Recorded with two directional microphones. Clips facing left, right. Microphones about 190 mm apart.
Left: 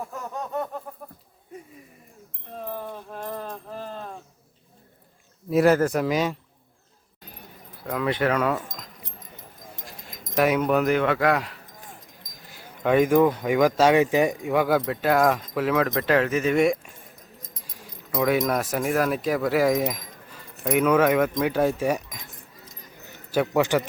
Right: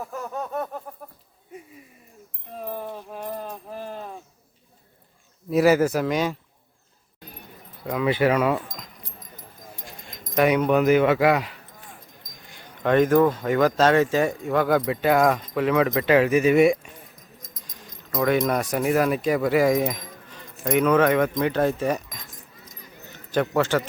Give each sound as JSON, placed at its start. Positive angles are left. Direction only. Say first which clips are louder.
{"t": 2.6, "sound": "a sound", "louder": "right 1 dB", "side_deg": -10}
{"t": 5.5, "sound": "speech", "louder": "right 1 dB", "side_deg": 0}
{"t": 7.9, "sound": "speech", "louder": "right 3 dB", "side_deg": -10}
{"t": 9.0, "sound": "keys jangling", "louder": "even", "side_deg": 20}
{"t": 9.8, "sound": "speech", "louder": "even", "side_deg": 0}
{"t": 17.7, "sound": "a man's voice", "louder": "even", "side_deg": 10}